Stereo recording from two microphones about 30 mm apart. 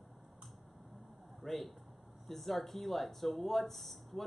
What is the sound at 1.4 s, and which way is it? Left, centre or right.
Speech, centre.